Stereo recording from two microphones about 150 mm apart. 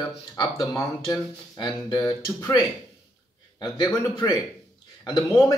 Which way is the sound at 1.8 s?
25° left (ahead or behind).